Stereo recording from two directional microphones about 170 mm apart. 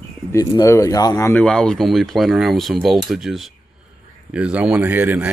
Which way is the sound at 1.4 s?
5° left (ahead or behind).